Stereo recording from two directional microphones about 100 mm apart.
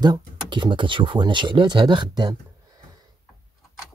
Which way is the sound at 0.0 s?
45° right (ahead or behind).